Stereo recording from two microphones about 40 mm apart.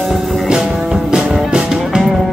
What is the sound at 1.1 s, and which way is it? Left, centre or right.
Music, right.